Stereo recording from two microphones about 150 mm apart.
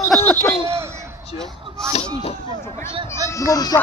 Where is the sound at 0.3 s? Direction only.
15° left (ahead or behind).